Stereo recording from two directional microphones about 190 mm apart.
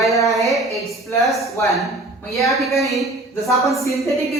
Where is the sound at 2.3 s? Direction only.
Centre (ahead or behind).